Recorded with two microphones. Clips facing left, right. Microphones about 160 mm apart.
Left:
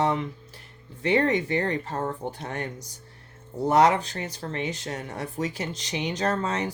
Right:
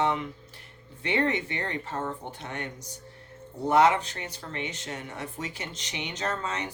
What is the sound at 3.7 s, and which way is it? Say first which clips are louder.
Speech: left 1 dB; 40° left (ahead or behind).